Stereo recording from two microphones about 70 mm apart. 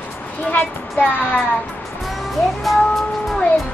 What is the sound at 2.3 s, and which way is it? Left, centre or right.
Music, centre.